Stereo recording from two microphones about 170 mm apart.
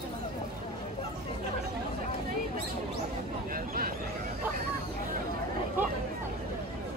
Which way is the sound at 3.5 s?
60° right (ahead or behind).